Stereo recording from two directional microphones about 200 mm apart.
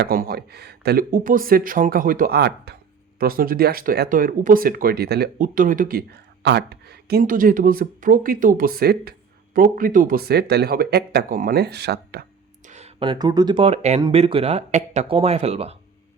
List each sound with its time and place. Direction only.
0.0 s speech: 50° right (ahead or behind)
12.6 s speech: 35° right (ahead or behind)